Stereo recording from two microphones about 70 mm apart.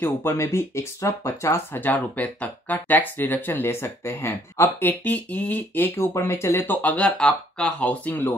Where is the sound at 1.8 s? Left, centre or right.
Left.